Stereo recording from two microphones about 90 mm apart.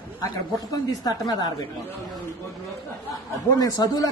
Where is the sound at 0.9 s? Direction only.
45° left (ahead or behind).